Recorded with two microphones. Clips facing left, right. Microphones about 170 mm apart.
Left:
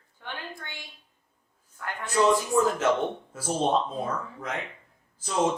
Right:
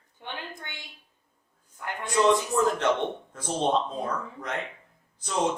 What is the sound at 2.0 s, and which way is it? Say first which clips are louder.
Speech: even; centre (ahead or behind).